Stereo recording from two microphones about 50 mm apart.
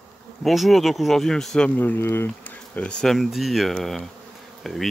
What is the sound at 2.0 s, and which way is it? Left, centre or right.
Speech, left.